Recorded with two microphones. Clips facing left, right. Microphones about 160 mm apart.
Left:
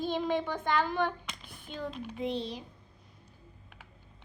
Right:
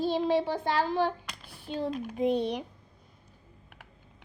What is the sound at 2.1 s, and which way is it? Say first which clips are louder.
Speech: right 8 dB; 45° right (ahead or behind).